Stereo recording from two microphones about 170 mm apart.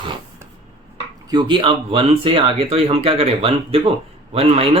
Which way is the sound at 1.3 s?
25° right (ahead or behind).